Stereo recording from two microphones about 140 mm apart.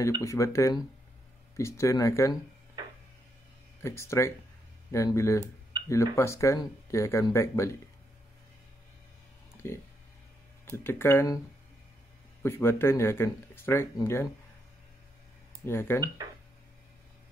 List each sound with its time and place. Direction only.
0.0 s speech: 20° left (ahead or behind)
2.8 s a sound: 30° right (ahead or behind)
3.8 s speech: 20° left (ahead or behind)
9.6 s speech: 20° left (ahead or behind)
12.4 s speech: 15° left (ahead or behind)
15.6 s speech: 15° left (ahead or behind)